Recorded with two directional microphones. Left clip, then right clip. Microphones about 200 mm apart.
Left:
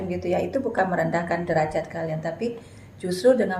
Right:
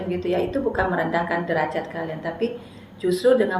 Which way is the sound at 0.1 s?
55° left (ahead or behind).